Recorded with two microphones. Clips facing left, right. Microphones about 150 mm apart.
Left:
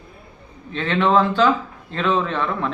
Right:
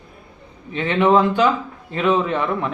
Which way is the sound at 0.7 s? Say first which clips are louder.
Right 2 dB; 15° right (ahead or behind).